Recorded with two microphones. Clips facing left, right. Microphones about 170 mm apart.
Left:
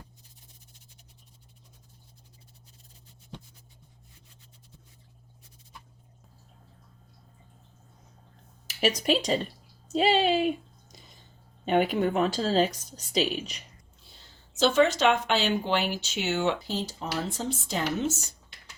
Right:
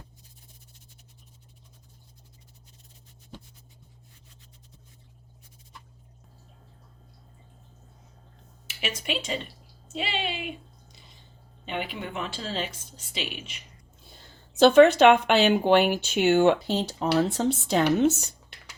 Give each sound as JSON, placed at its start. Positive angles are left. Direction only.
{"t": 8.6, "sound": "a woman's voice", "side_deg": 40}
{"t": 11.6, "sound": "a woman's voice", "side_deg": 45}
{"t": 14.1, "sound": "speech", "side_deg": -55}